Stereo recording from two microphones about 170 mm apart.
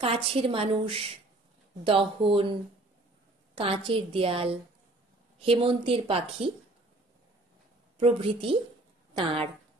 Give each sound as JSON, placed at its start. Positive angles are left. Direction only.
{"t": 0.0, "sound": "speech", "side_deg": -35}
{"t": 3.5, "sound": "speech", "side_deg": -35}
{"t": 8.0, "sound": "speech", "side_deg": -35}